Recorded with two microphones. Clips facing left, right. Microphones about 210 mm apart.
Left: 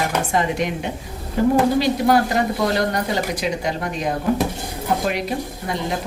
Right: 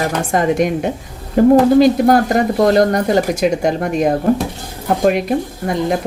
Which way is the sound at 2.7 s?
50° right (ahead or behind).